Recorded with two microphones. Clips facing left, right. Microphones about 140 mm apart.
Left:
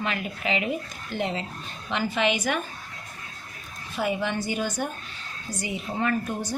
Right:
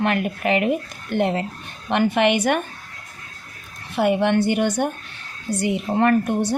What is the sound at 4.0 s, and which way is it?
Speech, 65° right (ahead or behind).